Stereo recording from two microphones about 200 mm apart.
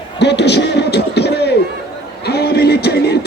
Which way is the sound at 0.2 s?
60° left (ahead or behind).